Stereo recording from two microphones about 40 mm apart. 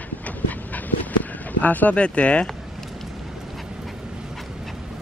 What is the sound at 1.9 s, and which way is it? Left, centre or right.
Speech, left.